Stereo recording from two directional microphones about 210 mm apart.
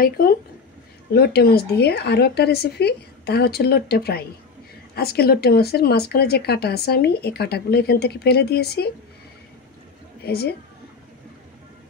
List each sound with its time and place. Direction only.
0.0 s speech: 45° left (ahead or behind)
10.2 s speech: 50° left (ahead or behind)